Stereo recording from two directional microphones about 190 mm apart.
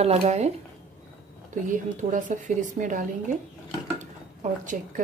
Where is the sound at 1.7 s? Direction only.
40° right (ahead or behind).